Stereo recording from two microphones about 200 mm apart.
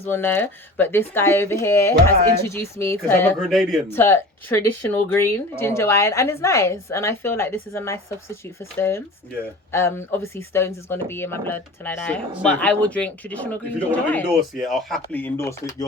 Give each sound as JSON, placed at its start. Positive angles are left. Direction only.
{"t": 0.0, "sound": "speech", "side_deg": 10}